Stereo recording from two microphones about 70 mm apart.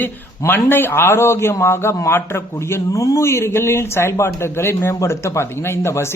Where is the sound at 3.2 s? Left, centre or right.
Left.